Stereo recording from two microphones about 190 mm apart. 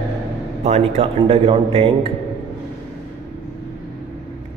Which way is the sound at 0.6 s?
35° right (ahead or behind).